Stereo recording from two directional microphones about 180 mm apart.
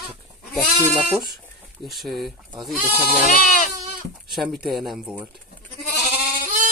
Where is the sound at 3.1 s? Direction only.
50° left (ahead or behind).